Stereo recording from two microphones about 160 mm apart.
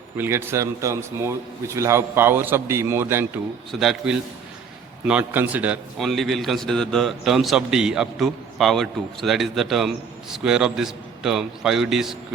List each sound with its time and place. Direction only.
0.2 s a man's voice: 15° right (ahead or behind)
3.7 s a man's voice: centre (ahead or behind)